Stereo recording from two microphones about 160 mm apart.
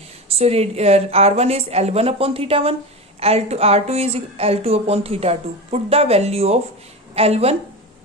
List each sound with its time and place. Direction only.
0.3 s a woman's voice: 40° right (ahead or behind)